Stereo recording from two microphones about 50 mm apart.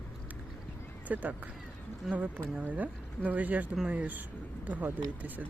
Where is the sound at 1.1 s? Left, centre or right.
Right.